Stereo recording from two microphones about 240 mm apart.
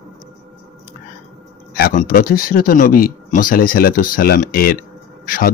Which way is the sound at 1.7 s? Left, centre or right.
Left.